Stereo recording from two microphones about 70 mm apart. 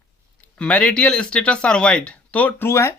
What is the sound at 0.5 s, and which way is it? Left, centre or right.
Speech, centre.